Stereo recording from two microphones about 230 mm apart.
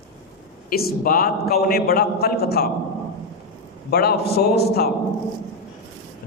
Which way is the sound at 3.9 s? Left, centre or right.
Left.